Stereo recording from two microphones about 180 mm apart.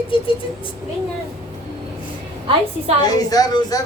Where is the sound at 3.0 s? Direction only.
20° left (ahead or behind).